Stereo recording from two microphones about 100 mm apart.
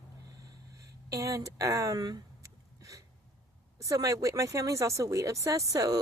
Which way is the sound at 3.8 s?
35° right (ahead or behind).